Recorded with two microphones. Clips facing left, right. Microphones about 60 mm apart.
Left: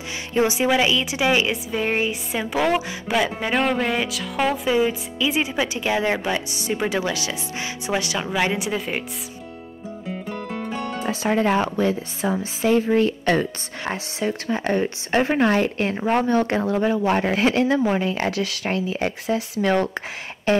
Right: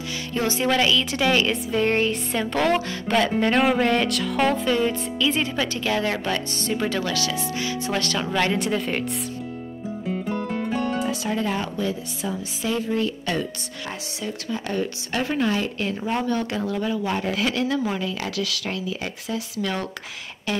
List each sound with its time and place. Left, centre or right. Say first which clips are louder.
0.3 s speech: left 3 dB; centre
11.2 s a woman's voice: left 6 dB; left
20.5 s a sound: left 8 dB; left